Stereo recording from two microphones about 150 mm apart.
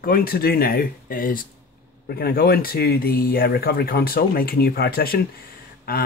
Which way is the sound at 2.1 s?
90° left.